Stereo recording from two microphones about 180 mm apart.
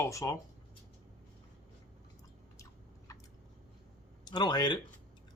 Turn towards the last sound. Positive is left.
turn(degrees=25)  # may be behind; listen again after turning